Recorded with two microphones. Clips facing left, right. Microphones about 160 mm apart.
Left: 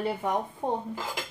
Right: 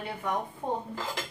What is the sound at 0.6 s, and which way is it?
Speech, 25° left (ahead or behind).